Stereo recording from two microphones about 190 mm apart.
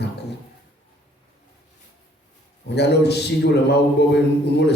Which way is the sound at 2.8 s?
60° left (ahead or behind).